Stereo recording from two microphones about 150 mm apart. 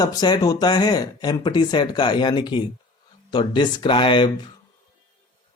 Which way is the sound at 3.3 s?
30° left (ahead or behind).